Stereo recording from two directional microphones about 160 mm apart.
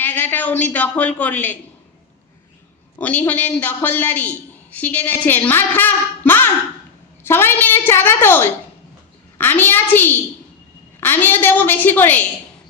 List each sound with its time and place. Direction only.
0.0 s a woman's voice: 10° left (ahead or behind)
3.0 s a man's voice: 10° left (ahead or behind)